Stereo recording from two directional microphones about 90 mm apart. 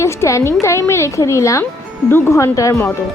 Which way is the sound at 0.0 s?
30° left (ahead or behind).